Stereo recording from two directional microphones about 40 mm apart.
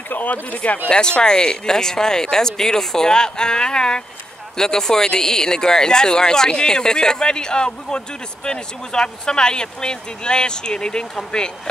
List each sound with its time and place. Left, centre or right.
0.1 s speech: left
0.8 s speech: left